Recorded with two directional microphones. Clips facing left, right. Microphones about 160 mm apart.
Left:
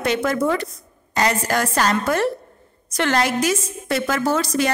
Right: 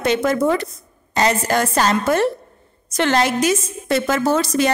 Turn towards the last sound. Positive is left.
turn(degrees=-20)  # may be behind; listen again after turning